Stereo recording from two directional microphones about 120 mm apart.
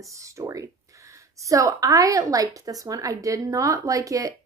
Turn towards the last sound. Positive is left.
turn(degrees=-30)  # may be behind; listen again after turning